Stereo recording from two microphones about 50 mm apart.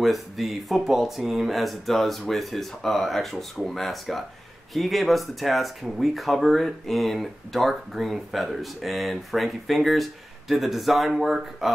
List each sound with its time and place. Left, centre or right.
0.0 s speech: centre